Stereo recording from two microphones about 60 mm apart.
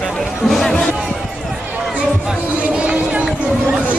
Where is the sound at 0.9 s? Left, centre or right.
Centre.